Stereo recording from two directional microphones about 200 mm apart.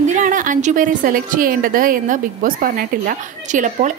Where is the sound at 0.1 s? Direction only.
40° right (ahead or behind).